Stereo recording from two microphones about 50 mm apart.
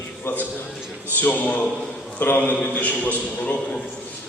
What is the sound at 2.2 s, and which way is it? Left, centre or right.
Speech, left.